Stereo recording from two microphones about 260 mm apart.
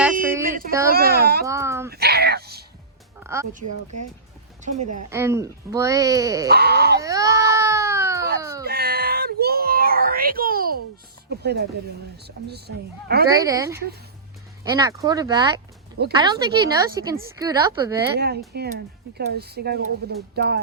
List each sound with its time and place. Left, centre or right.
0.4 s a sound: right
0.9 s a child's voice: right
1.5 s speech: centre
1.9 s a sound: right
4.6 s a woman's voice: right
5.1 s speech: centre
6.5 s speech: right
7.0 s baby cry: centre
8.6 s a sound: right
11.3 s speech: right
13.3 s speech: centre
18.2 s speech: right